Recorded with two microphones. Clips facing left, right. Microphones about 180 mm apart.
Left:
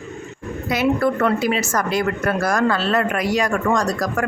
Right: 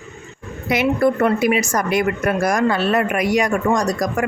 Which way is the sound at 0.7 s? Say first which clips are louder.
Right 2 dB; 15° right (ahead or behind).